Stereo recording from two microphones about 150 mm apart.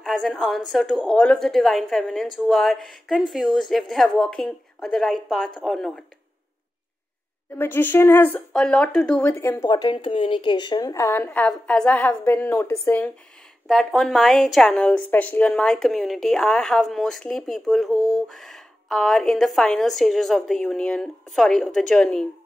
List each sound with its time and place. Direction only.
0.0 s a woman's voice: centre (ahead or behind)
7.5 s a woman's voice: 15° left (ahead or behind)
9.3 s speech: 20° left (ahead or behind)
9.7 s a woman's voice: 30° left (ahead or behind); by 13.1 s 10° left (ahead or behind)
13.7 s a woman's voice: centre (ahead or behind)